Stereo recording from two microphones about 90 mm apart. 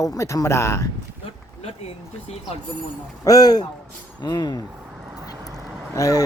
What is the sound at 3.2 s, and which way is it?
Speech, 45° left (ahead or behind).